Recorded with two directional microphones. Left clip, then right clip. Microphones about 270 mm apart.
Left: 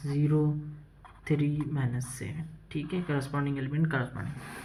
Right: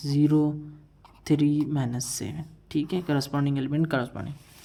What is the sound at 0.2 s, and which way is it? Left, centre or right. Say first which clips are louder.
Speech: right 7 dB; right.